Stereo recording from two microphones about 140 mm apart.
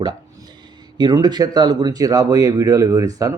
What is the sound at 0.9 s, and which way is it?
Speech, 30° right (ahead or behind).